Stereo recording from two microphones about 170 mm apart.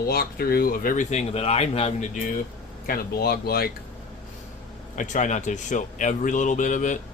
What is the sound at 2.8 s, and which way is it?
Speech, 60° left (ahead or behind).